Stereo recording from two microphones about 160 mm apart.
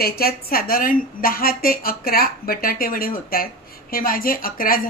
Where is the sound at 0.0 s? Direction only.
75° left (ahead or behind).